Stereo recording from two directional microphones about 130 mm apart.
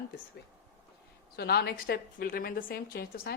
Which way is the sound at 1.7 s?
90° left.